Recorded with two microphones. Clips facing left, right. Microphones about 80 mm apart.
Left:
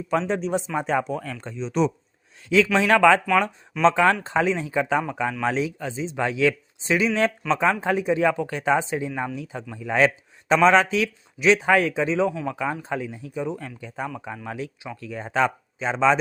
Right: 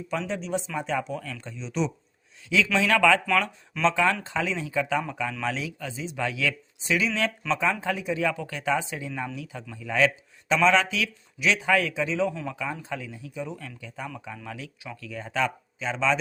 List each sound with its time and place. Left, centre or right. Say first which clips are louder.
0.1 s speech: left 6 dB; left